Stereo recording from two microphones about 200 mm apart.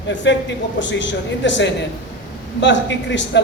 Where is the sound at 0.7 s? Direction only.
65° left (ahead or behind).